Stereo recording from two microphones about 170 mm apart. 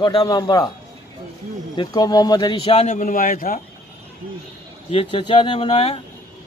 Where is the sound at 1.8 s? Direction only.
25° left (ahead or behind); by 3.6 s 55° left (ahead or behind).